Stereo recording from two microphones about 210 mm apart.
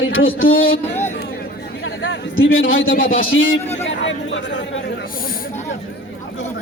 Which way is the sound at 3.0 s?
70° left (ahead or behind).